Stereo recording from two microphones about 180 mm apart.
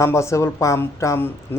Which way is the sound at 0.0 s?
15° left (ahead or behind).